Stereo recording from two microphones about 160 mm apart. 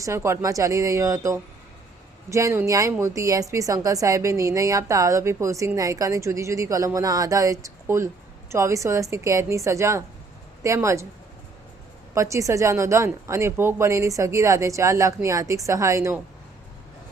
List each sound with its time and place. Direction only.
0.0 s a woman's voice: 15° right (ahead or behind)
12.1 s a woman's voice: 20° right (ahead or behind)